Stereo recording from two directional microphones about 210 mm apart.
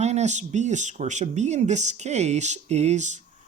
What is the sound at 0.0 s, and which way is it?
Speech, 30° right (ahead or behind).